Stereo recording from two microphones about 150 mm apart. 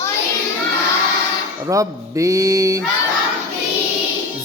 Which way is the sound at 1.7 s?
20° right (ahead or behind).